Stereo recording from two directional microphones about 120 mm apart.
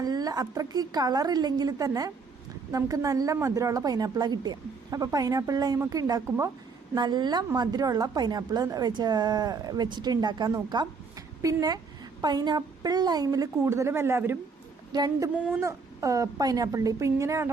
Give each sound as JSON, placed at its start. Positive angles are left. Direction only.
{"t": 0.0, "sound": "a woman's voice", "side_deg": -30}
{"t": 6.9, "sound": "a woman's voice", "side_deg": -40}
{"t": 14.9, "sound": "a woman's voice", "side_deg": -35}